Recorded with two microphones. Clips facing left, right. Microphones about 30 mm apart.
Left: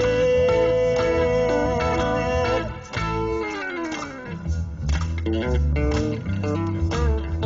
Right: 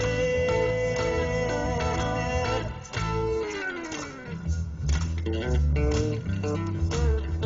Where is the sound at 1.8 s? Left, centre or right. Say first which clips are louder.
Left 6 dB; left.